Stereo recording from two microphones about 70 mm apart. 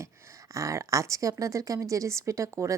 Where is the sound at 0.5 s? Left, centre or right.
Right.